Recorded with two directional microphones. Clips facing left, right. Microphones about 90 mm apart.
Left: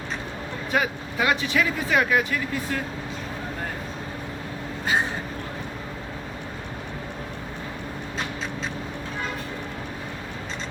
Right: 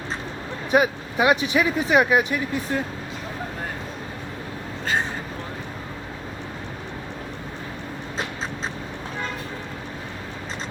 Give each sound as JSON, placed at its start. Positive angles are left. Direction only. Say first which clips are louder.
{"t": 0.7, "sound": "speech", "louder": "right 6 dB", "side_deg": -20}